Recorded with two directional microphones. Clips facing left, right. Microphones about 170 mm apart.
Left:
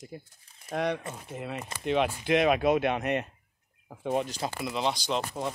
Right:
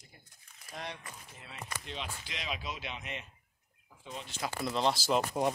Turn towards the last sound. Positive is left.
turn(degrees=-5)  # may be behind; listen again after turning